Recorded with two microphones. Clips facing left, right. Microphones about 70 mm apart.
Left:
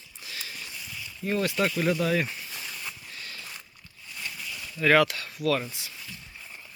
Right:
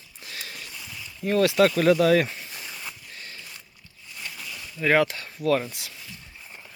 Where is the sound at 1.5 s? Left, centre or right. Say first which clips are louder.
Right 8 dB; right.